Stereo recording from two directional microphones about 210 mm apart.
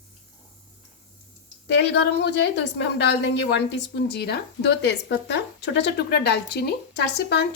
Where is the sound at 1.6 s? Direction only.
55° left (ahead or behind).